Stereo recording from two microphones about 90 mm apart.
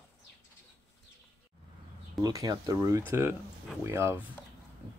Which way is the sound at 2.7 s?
35° right (ahead or behind).